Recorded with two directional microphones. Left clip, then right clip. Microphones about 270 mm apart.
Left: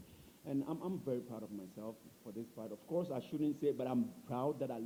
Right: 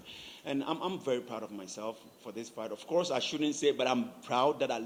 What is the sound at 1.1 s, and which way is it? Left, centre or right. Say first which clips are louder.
A man's voice: right 8 dB; centre.